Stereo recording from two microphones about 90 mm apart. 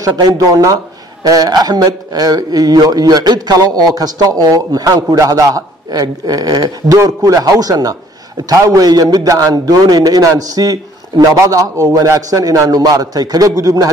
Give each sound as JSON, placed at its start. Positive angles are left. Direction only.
{"t": 0.0, "sound": "a man's voice", "side_deg": -50}